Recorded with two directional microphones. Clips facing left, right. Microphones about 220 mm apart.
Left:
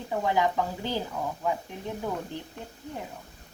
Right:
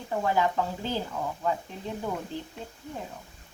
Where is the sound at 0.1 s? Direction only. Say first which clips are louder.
Even; 15° left (ahead or behind).